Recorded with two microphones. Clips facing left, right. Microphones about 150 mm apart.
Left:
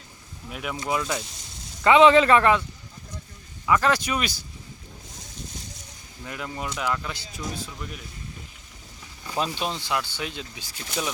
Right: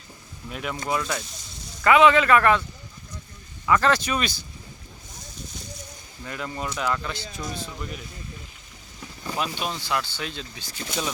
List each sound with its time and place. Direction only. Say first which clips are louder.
0.5 s speech: even; 10° left (ahead or behind)
1.8 s speech: left 2 dB; 25° left (ahead or behind)
3.7 s speech: right 1 dB; 10° left (ahead or behind)
6.2 s speech: right 1 dB; 10° left (ahead or behind)
9.4 s speech: left 2 dB; 25° left (ahead or behind); by 11.1 s 5° left (ahead or behind)